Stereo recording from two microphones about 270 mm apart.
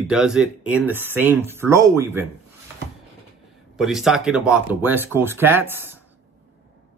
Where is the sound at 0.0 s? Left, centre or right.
Centre.